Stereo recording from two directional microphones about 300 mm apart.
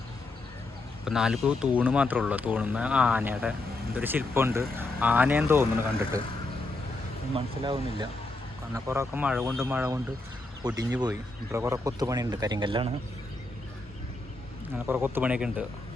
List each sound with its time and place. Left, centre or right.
1.0 s speech: centre
7.3 s speech: centre
14.8 s speech: centre